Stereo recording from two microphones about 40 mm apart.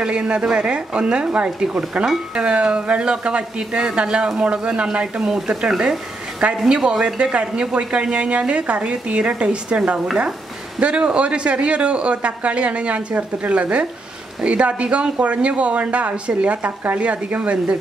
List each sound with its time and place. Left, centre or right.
0.0 s speech: right